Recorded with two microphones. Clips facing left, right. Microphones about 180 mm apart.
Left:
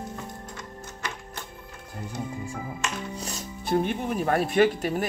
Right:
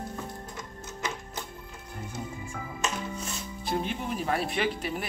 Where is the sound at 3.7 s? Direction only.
55° left (ahead or behind).